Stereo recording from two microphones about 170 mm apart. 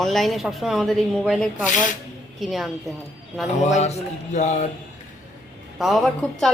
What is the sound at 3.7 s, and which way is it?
Speech, 40° left (ahead or behind).